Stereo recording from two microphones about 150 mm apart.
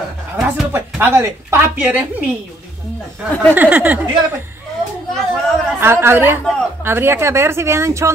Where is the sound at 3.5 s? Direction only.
10° right (ahead or behind).